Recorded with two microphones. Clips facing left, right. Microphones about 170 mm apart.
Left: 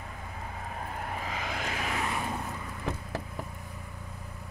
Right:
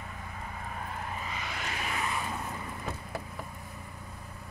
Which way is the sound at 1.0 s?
75° left (ahead or behind).